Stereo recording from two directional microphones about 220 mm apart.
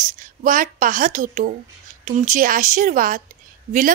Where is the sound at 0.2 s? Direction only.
40° right (ahead or behind).